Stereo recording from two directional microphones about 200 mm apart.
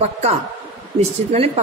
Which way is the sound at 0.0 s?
35° right (ahead or behind).